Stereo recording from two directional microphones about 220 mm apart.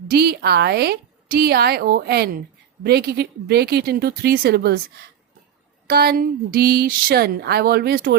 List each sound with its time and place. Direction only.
0.1 s a woman's voice: 45° right (ahead or behind)
5.9 s a woman's voice: 45° right (ahead or behind)